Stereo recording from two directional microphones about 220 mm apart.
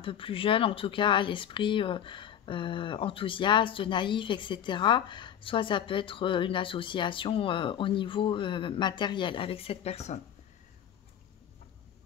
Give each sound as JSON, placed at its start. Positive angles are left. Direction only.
{"t": 0.0, "sound": "speech", "side_deg": 25}